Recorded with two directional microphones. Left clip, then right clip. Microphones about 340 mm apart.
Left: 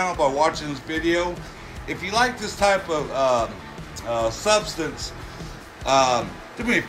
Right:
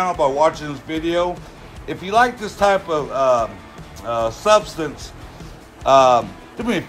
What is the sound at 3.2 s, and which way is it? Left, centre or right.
Speech, centre.